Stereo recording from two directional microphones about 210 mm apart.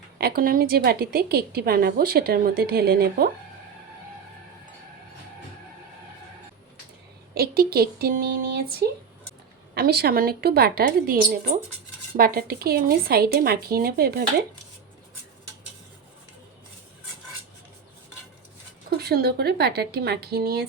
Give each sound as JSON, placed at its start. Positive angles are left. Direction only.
{"t": 0.2, "sound": "a woman's voice", "side_deg": -50}
{"t": 7.3, "sound": "a woman's voice", "side_deg": -45}
{"t": 18.9, "sound": "a woman's voice", "side_deg": -50}